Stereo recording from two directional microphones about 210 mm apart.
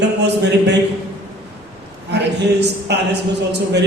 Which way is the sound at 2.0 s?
55° right (ahead or behind).